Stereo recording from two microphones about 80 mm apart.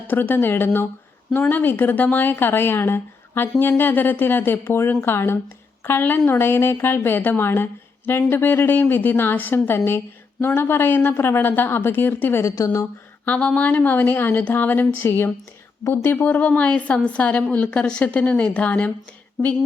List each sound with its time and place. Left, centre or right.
0.1 s a woman's voice: left
12.4 s a woman's voice: left
13.2 s a woman's voice: centre